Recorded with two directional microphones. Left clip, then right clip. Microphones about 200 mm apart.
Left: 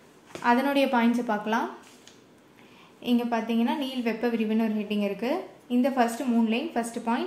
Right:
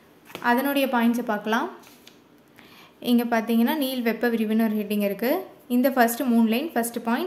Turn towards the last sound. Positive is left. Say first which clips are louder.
# right 3 dB
turn(degrees=-20)  # may be behind; listen again after turning